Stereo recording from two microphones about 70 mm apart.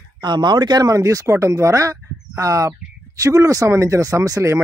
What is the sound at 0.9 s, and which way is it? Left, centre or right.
Speech, right.